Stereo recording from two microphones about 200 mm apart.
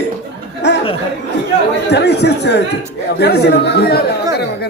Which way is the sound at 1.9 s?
55° left (ahead or behind).